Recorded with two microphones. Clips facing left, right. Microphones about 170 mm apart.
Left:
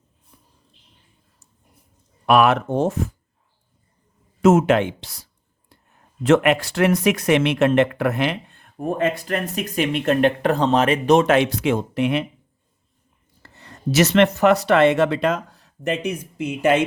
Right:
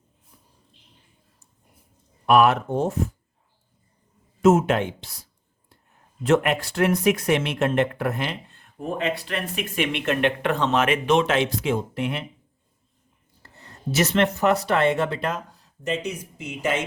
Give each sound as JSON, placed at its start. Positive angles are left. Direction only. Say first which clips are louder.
{"t": 2.2, "sound": "speech", "louder": "left 1 dB", "side_deg": 80}
{"t": 4.4, "sound": "speech", "louder": "left 3 dB", "side_deg": 85}
{"t": 13.4, "sound": "speech", "louder": "left 5 dB", "side_deg": 90}